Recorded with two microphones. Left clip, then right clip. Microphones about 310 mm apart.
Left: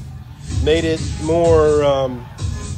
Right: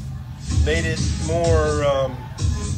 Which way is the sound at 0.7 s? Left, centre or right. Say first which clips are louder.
Left 7 dB; centre.